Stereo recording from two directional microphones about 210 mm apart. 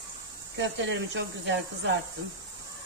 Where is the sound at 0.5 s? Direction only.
55° right (ahead or behind).